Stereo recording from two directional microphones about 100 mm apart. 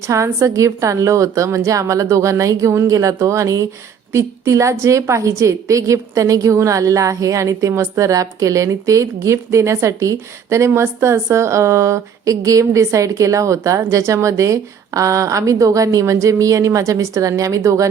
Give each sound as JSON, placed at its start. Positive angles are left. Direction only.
{"t": 0.1, "sound": "a woman's voice", "side_deg": -30}